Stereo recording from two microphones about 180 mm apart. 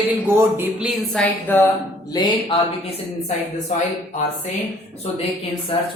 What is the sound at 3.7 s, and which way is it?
Speech, 40° left (ahead or behind).